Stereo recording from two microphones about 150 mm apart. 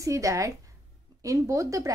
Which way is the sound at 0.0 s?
20° right (ahead or behind).